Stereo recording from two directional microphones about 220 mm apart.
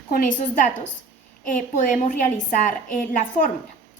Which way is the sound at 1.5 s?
35° left (ahead or behind).